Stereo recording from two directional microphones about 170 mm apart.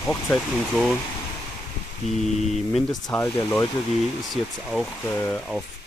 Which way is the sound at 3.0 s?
10° left (ahead or behind).